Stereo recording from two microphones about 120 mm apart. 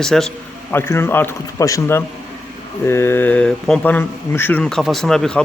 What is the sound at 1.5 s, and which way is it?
Speech, 30° left (ahead or behind).